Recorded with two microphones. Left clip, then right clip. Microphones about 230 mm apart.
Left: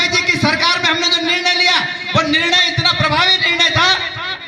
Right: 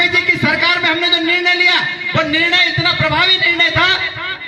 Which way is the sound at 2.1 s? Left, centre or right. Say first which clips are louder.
Even; left.